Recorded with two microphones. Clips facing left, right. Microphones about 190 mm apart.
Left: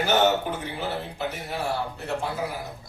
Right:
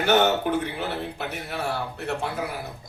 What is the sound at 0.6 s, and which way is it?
A man's voice, 65° right (ahead or behind).